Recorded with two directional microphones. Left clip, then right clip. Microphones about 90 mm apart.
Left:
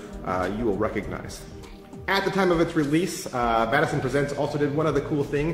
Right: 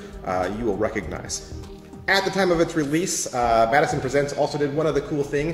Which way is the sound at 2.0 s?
30° left (ahead or behind).